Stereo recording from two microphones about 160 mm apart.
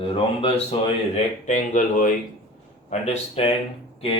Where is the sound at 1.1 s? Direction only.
50° left (ahead or behind).